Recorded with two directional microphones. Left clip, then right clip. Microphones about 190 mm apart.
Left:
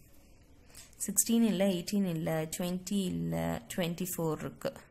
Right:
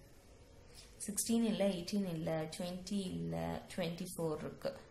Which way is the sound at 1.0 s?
50° left (ahead or behind).